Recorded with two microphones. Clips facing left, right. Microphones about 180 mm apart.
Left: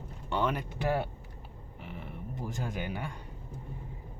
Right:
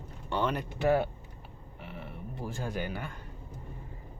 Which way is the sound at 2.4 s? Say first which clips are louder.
Right 2 dB; 20° left (ahead or behind).